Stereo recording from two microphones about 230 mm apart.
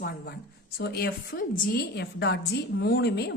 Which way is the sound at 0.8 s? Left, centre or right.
Left.